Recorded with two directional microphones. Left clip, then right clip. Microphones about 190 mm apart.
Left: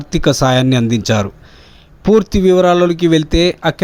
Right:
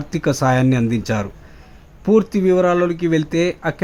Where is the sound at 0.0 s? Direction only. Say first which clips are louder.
Left 5 dB; 15° left (ahead or behind).